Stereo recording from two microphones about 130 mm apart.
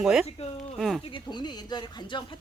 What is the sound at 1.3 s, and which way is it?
Speech, 35° left (ahead or behind).